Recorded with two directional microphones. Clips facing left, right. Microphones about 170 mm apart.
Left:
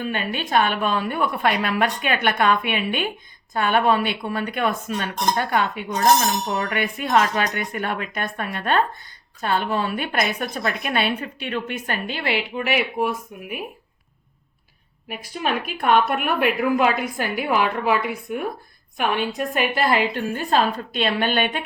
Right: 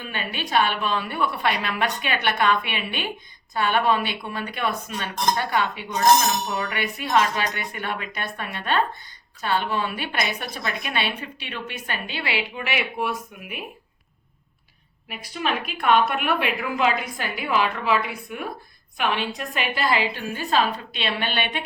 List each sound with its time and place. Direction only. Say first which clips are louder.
0.1 s a woman's voice: left 1 dB; 50° left (ahead or behind)
15.2 s a woman's voice: left 2 dB; 50° left (ahead or behind)